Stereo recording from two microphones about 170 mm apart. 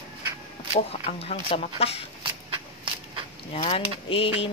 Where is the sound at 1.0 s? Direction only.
35° left (ahead or behind).